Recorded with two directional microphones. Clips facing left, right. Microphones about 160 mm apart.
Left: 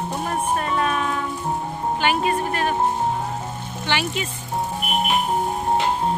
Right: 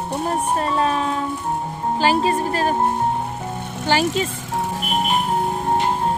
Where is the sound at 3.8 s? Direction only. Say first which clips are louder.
Right 6 dB; 40° right (ahead or behind).